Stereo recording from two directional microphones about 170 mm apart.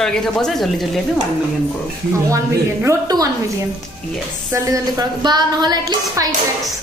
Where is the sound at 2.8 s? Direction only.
20° right (ahead or behind).